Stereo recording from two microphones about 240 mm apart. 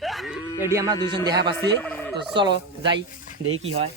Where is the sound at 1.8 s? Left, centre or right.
Centre.